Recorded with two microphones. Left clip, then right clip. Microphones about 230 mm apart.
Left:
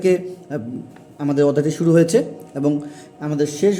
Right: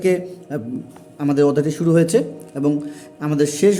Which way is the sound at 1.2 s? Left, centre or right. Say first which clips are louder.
Right 1 dB; centre.